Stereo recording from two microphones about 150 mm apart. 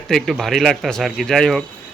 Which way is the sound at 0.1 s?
Centre (ahead or behind).